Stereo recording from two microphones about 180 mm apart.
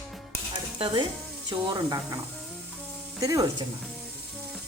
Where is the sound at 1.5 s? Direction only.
20° right (ahead or behind).